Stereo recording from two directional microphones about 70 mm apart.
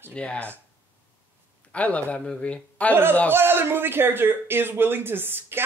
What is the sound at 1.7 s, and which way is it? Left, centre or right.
Speech, centre.